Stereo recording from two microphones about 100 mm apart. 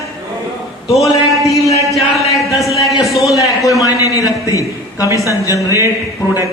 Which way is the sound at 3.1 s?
Centre (ahead or behind).